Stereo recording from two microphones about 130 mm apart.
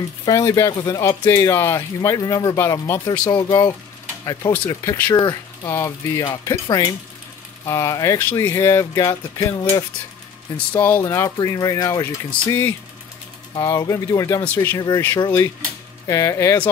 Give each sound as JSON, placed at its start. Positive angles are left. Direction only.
{"t": 0.2, "sound": "speech", "side_deg": 30}
{"t": 14.4, "sound": "speech", "side_deg": 15}
{"t": 14.8, "sound": "speech", "side_deg": 30}